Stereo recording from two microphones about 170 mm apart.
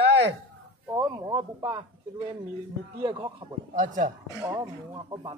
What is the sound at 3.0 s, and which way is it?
Speech, 30° right (ahead or behind).